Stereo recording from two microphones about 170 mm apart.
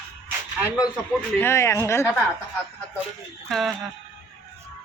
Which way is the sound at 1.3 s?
15° left (ahead or behind).